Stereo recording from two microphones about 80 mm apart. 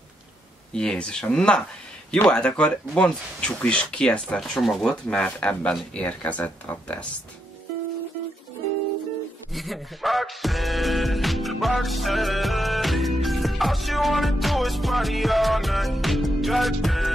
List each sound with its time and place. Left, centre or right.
0.7 s speech: centre
4.6 s speech: centre
5.0 s speech: centre
9.5 s music: centre